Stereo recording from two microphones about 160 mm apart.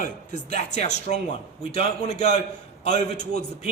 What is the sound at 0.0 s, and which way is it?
A man's voice, 55° left (ahead or behind).